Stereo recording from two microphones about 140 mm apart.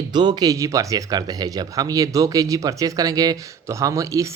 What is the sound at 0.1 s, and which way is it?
Speech, 30° right (ahead or behind).